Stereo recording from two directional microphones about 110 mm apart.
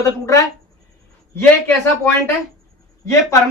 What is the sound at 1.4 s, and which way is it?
Speech, 15° left (ahead or behind).